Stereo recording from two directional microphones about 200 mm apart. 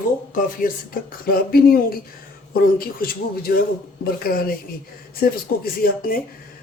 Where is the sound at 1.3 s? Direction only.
50° left (ahead or behind).